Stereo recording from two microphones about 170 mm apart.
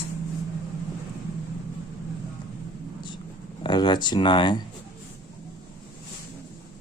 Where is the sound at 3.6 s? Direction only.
25° left (ahead or behind).